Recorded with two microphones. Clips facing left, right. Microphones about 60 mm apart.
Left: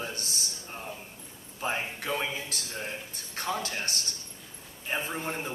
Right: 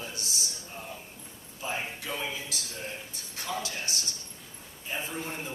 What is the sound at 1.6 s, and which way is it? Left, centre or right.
A man's voice, left.